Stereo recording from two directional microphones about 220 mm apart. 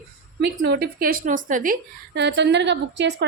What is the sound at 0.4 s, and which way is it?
A woman's voice, 50° right (ahead or behind).